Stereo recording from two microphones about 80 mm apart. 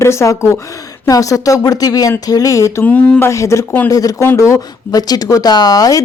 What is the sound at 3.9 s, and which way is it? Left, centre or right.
A woman's voice, left.